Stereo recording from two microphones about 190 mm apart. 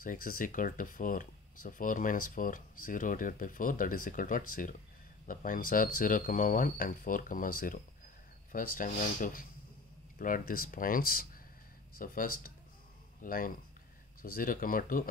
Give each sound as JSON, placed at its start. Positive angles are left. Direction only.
{"t": 0.0, "sound": "speech", "side_deg": 45}